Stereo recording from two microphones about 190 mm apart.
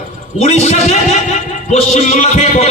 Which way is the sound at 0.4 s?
35° left (ahead or behind).